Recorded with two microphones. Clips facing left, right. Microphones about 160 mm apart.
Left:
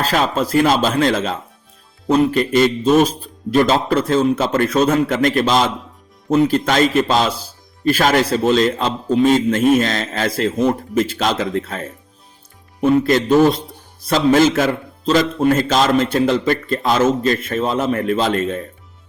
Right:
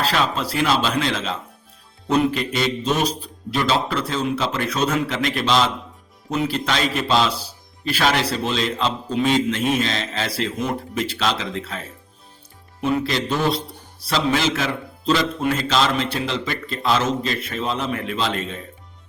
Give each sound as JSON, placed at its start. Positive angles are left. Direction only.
{"t": 0.0, "sound": "a man's voice", "side_deg": 45}
{"t": 2.0, "sound": "a man's voice", "side_deg": 35}
{"t": 2.4, "sound": "a man's voice", "side_deg": 50}